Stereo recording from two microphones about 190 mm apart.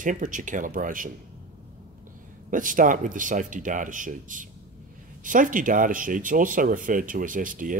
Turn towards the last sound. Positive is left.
turn(degrees=-45)  # may be behind; listen again after turning